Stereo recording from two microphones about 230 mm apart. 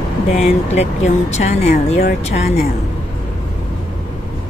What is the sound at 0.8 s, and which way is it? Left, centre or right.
Speech, left.